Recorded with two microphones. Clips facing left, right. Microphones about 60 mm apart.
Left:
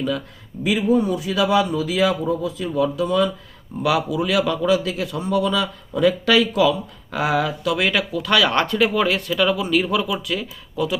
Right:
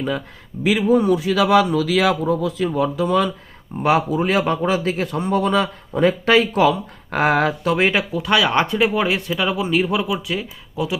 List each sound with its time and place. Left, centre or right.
0.6 s speech: right
0.9 s speech: right
2.2 s speech: right
2.7 s a man's voice: right